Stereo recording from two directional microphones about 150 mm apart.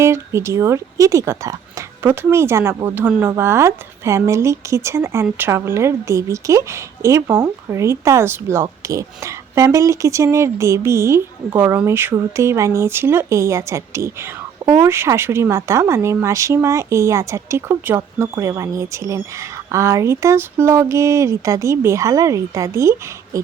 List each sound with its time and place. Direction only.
0.0 s a woman's voice: 20° right (ahead or behind)